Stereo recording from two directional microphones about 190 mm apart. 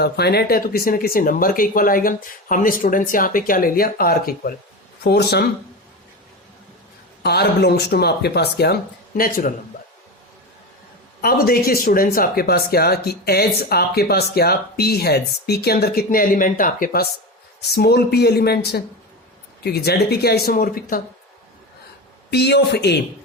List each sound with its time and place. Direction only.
0.0 s speech: 55° left (ahead or behind)
7.2 s speech: 60° left (ahead or behind)
11.2 s speech: 50° left (ahead or behind)
22.3 s speech: 60° left (ahead or behind)